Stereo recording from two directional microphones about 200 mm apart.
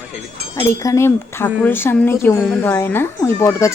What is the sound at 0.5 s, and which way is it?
Speech, 15° left (ahead or behind).